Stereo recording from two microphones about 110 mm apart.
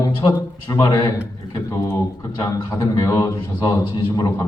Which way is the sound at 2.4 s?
35° left (ahead or behind).